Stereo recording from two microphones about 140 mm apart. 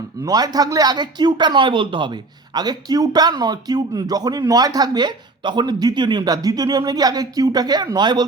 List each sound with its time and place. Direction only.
0.3 s speech: 30° right (ahead or behind)